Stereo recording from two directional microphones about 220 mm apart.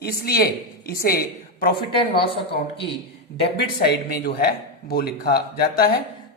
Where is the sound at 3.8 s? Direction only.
45° left (ahead or behind).